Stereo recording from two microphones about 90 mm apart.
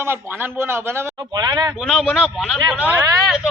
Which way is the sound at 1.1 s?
50° right (ahead or behind).